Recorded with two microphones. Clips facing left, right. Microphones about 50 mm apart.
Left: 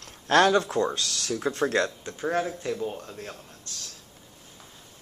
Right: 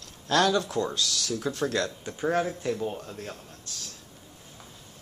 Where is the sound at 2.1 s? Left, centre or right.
Centre.